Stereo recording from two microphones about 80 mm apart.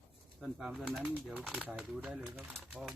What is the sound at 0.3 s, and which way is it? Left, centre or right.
Speech, centre.